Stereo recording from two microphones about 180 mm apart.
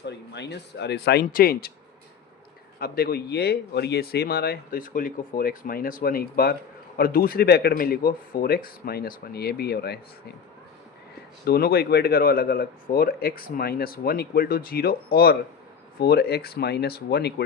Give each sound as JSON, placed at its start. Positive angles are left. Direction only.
{"t": 0.0, "sound": "speech", "side_deg": 70}
{"t": 2.8, "sound": "speech", "side_deg": 55}
{"t": 11.4, "sound": "speech", "side_deg": 60}